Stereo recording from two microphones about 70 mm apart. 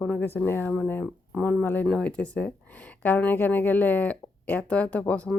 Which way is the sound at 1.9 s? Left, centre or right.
Centre.